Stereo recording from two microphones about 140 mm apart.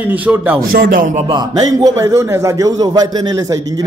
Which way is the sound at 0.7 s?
85° right.